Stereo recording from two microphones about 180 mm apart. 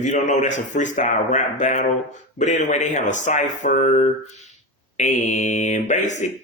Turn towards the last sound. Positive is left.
turn(degrees=40)  # may be behind; listen again after turning